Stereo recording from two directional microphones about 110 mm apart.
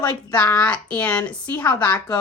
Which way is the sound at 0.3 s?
15° left (ahead or behind).